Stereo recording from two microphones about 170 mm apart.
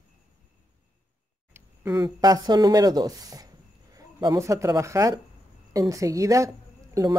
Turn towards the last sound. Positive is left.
turn(degrees=-20)  # may be behind; listen again after turning